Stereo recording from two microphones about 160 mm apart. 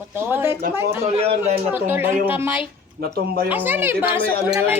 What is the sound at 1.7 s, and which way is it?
Speech, 15° right (ahead or behind).